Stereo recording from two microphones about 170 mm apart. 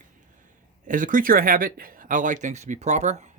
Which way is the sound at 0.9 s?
50° right (ahead or behind).